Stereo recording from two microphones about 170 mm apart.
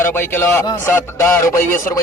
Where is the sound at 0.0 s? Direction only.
15° left (ahead or behind).